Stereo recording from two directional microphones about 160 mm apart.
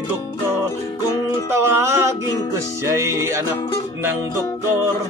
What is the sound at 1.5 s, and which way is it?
Music, 15° right (ahead or behind).